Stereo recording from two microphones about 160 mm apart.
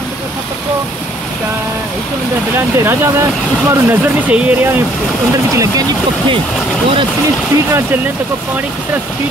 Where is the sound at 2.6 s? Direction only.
15° right (ahead or behind).